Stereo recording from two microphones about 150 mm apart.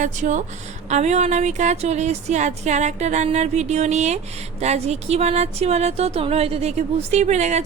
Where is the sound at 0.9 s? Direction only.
50° right (ahead or behind).